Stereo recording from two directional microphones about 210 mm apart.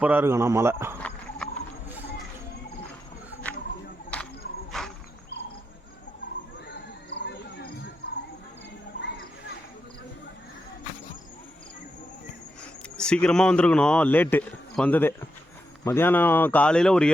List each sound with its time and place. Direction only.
0.0 s a man's voice: 10° right (ahead or behind)
1.4 s rodents: 5° left (ahead or behind)
3.4 s a sound: 5° left (ahead or behind)
4.7 s insect: centre (ahead or behind)
7.1 s cricket: 55° left (ahead or behind)
13.0 s a man's voice: 5° left (ahead or behind)